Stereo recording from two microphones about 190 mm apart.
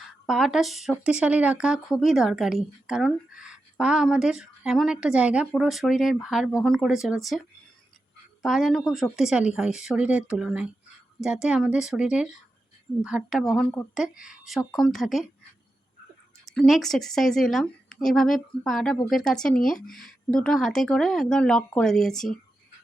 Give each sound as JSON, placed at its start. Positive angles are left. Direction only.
{"t": 0.3, "sound": "speech", "side_deg": 0}
{"t": 16.6, "sound": "speech", "side_deg": 0}